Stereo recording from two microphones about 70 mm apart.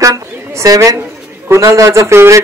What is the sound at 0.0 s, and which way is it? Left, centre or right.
A woman's voice, right.